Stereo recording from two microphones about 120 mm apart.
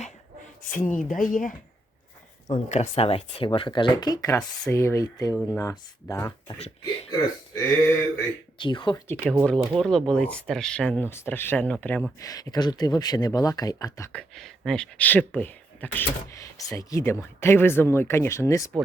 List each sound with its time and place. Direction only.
0.6 s speech: 90° left
2.6 s speech: 70° left (ahead or behind); by 7.9 s 25° left (ahead or behind)
8.5 s speech: 40° left (ahead or behind)
9.0 s speech: 10° left (ahead or behind)
11.1 s speech: 20° left (ahead or behind)
12.2 s speech: 30° left (ahead or behind)
14.1 s speech: 5° left (ahead or behind)
16.3 s speech: 30° left (ahead or behind)